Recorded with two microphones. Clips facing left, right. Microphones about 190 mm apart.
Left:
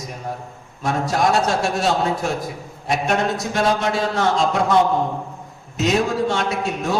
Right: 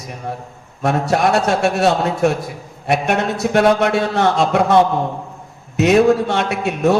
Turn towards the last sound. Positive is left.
turn(degrees=-65)  # may be behind; listen again after turning